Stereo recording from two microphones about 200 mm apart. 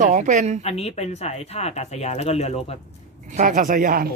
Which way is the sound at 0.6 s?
30° left (ahead or behind).